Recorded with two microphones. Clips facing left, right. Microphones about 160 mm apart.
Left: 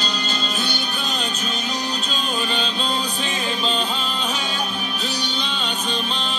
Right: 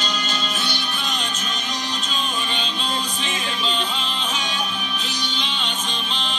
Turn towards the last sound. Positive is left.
turn(degrees=40)  # may be behind; listen again after turning